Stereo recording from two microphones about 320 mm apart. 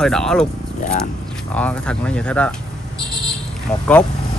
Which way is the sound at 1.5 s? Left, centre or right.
Centre.